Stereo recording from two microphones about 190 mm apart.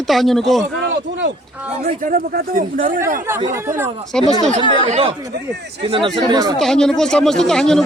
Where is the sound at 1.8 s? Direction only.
45° right (ahead or behind).